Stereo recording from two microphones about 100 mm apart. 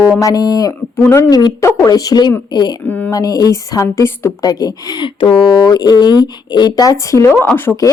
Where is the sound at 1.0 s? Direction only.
25° left (ahead or behind).